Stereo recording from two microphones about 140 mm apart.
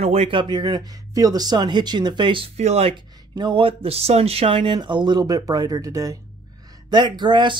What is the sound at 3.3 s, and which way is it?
Speech, 35° right (ahead or behind).